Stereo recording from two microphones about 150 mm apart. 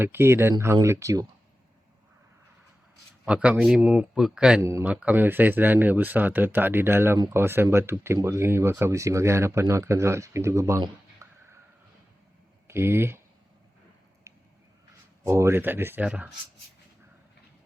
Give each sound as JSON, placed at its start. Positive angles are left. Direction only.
{"t": 0.0, "sound": "speech", "side_deg": -15}
{"t": 3.2, "sound": "speech", "side_deg": -5}
{"t": 4.6, "sound": "speech", "side_deg": -20}
{"t": 12.6, "sound": "speech", "side_deg": -15}
{"t": 15.2, "sound": "speech", "side_deg": -20}